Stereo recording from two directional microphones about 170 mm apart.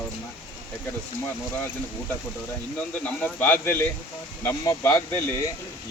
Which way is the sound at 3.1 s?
10° left (ahead or behind).